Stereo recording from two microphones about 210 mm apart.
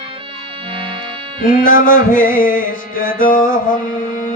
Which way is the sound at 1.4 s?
40° left (ahead or behind).